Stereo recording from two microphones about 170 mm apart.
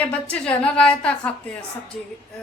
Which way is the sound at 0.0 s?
5° left (ahead or behind).